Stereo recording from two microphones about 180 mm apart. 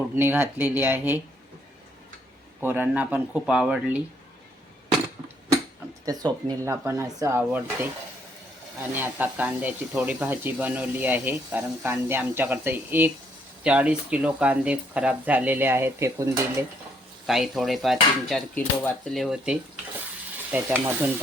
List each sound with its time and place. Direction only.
0.2 s speech: 10° right (ahead or behind)
2.6 s speech: 10° right (ahead or behind)
6.1 s speech: 20° right (ahead or behind)
9.0 s speech: 10° right (ahead or behind)
17.2 s dishes: centre (ahead or behind)
20.5 s speech: 10° right (ahead or behind)